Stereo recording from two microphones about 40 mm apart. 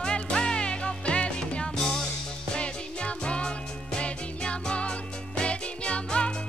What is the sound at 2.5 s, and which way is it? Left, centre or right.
Music, left.